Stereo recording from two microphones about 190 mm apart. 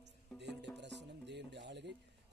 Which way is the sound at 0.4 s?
65° right (ahead or behind).